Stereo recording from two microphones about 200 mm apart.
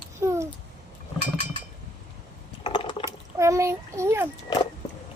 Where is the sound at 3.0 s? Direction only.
15° right (ahead or behind).